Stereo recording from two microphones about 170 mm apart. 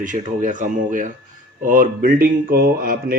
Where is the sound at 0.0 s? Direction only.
50° right (ahead or behind).